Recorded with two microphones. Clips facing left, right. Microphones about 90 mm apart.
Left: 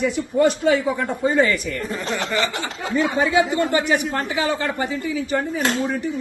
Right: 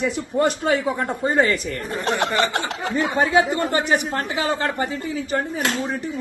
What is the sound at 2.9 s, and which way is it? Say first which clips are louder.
Speech: even; 40° right (ahead or behind).